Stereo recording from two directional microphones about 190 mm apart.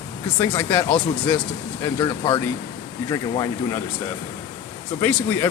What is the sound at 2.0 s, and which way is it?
Speech, 25° left (ahead or behind).